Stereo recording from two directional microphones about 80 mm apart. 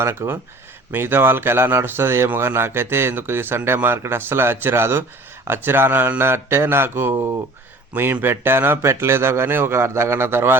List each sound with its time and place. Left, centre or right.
0.0 s a man's voice: right